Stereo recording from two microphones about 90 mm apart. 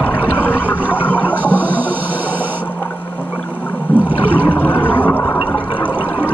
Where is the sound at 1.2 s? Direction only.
20° right (ahead or behind).